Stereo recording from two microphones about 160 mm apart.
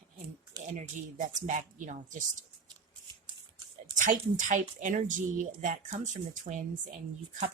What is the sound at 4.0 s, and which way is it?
A woman's voice, 55° right (ahead or behind).